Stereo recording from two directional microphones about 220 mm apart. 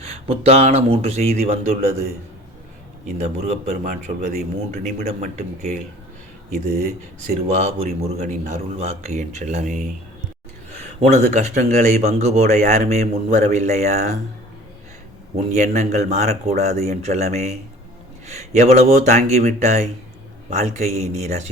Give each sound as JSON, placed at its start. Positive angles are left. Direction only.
{"t": 0.0, "sound": "speech", "side_deg": -25}
{"t": 3.2, "sound": "speech", "side_deg": -30}
{"t": 6.8, "sound": "speech", "side_deg": -30}
{"t": 11.0, "sound": "speech", "side_deg": -30}
{"t": 15.5, "sound": "speech", "side_deg": -30}